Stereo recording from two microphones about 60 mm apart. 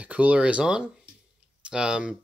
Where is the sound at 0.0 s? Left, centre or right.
Right.